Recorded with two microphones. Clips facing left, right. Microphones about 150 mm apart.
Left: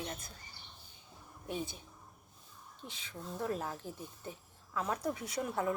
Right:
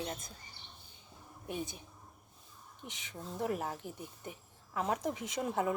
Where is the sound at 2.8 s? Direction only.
20° right (ahead or behind).